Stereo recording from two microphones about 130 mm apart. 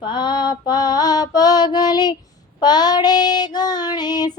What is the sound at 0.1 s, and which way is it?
Mantra, 35° left (ahead or behind).